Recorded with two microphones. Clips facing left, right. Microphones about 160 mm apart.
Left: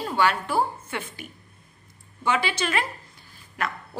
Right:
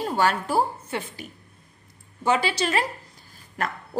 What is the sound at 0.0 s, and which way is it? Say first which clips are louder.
A woman's voice: right 1 dB; 40° right (ahead or behind).